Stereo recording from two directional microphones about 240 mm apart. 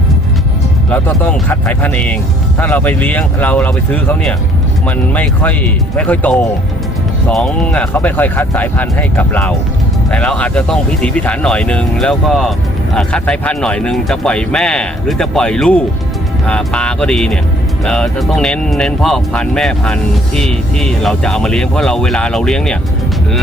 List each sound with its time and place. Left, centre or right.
0.9 s speech: centre